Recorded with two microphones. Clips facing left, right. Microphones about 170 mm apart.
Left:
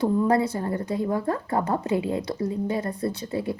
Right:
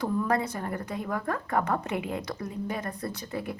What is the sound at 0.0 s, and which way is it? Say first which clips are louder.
A woman's voice: left 6 dB; 30° left (ahead or behind).